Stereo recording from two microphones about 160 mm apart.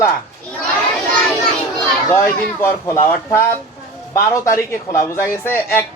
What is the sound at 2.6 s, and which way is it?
A man's voice, 15° left (ahead or behind).